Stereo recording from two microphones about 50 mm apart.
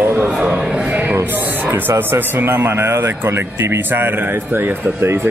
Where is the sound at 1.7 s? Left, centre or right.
Right.